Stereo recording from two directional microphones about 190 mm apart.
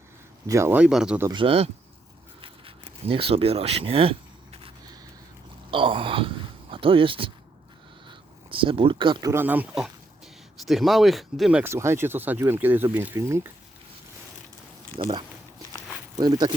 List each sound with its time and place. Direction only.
0.4 s speech: 15° right (ahead or behind)
1.3 s speech: 30° right (ahead or behind)
2.4 s a sound: 30° right (ahead or behind)
5.7 s speech: 25° right (ahead or behind)
8.4 s speech: 25° right (ahead or behind)
9.3 s speech: 10° right (ahead or behind)
15.0 s speech: 30° right (ahead or behind)
16.1 s speech: 20° right (ahead or behind)